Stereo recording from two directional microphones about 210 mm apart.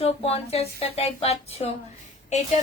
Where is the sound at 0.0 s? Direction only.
30° left (ahead or behind).